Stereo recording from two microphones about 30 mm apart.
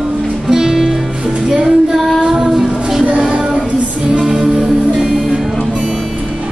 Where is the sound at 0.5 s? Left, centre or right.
Centre.